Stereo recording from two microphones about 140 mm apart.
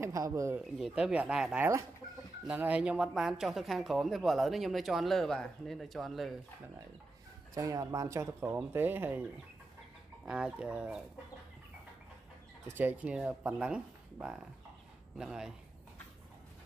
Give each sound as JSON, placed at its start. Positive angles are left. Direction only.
{"t": 0.0, "sound": "speech", "side_deg": -20}
{"t": 0.6, "sound": "speech", "side_deg": -5}
{"t": 7.5, "sound": "speech", "side_deg": -25}
{"t": 10.2, "sound": "speech", "side_deg": -5}
{"t": 12.6, "sound": "speech", "side_deg": -15}